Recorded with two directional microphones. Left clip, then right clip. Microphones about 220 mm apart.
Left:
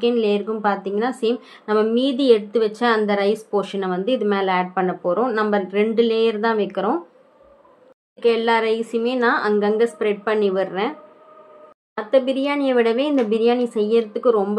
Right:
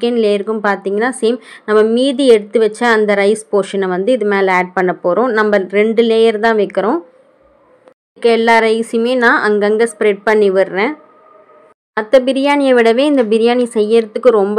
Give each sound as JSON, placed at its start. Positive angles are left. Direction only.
{"t": 0.0, "sound": "speech", "side_deg": -40}
{"t": 8.2, "sound": "speech", "side_deg": -45}